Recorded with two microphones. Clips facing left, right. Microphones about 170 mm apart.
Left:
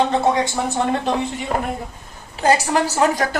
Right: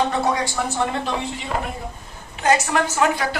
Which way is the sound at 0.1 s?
25° left (ahead or behind).